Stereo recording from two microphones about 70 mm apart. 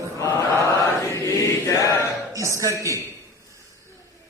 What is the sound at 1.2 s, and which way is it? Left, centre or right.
Choir, left.